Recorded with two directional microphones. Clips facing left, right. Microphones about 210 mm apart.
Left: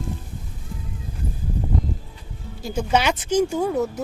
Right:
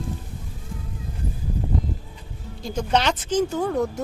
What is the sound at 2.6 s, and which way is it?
A woman's voice, 10° left (ahead or behind).